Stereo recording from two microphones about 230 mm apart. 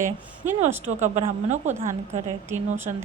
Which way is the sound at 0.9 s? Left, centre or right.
Right.